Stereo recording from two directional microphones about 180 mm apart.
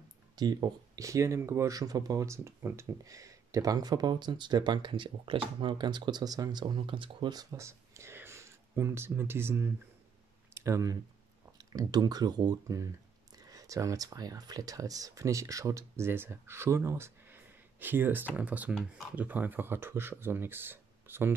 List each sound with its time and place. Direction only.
0.4 s speech: 20° right (ahead or behind)